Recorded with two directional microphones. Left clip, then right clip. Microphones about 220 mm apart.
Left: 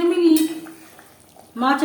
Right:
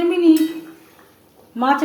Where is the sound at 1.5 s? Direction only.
5° right (ahead or behind).